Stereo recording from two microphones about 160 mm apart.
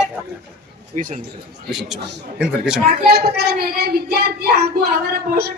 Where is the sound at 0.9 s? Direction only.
50° right (ahead or behind).